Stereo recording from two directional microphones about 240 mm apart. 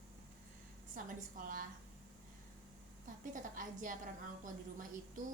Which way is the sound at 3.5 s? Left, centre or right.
Right.